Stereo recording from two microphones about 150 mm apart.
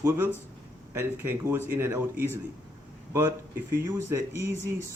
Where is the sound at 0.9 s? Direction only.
15° right (ahead or behind).